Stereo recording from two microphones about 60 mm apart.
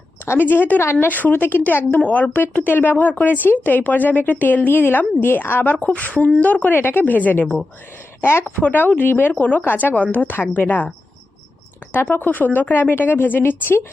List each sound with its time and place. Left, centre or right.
0.3 s speech: left
2.0 s speech: left
8.2 s speech: left
8.5 s speech: left
11.9 s speech: left